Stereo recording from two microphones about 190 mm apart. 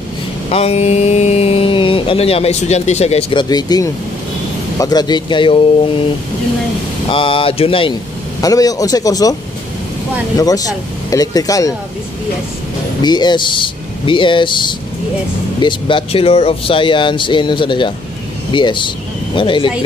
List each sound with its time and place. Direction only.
0.5 s speech: 30° left (ahead or behind)
3.4 s speech: 20° left (ahead or behind)
7.1 s speech: 30° left (ahead or behind)
8.4 s speech: 20° left (ahead or behind)
13.0 s speech: 20° left (ahead or behind)